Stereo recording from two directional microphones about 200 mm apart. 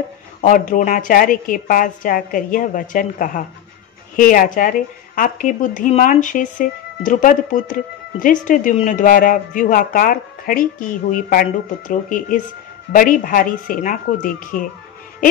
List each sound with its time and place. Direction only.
0.4 s speech: 40° left (ahead or behind)